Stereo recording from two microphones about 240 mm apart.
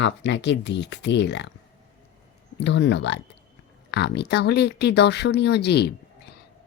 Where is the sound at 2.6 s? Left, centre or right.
Left.